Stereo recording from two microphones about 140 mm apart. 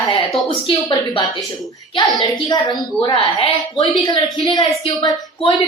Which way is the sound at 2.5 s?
30° left (ahead or behind).